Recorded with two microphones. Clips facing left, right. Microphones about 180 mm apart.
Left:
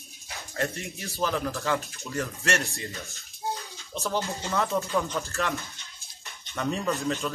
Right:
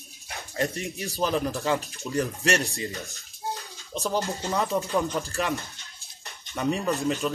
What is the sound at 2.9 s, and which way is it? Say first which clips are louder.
Speech: right 3 dB; 35° right (ahead or behind).